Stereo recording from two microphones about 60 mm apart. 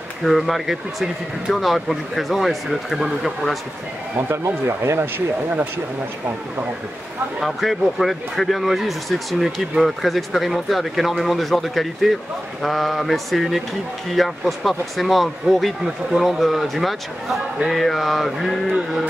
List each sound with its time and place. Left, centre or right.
0.2 s speech: centre
4.3 s speech: right
7.3 s speech: centre